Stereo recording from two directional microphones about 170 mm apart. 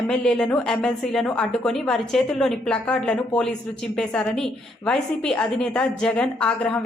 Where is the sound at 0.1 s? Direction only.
5° left (ahead or behind).